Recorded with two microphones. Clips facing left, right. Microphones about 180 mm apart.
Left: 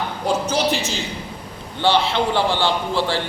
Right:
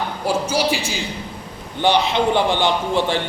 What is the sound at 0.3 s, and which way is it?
A man's voice, 10° right (ahead or behind).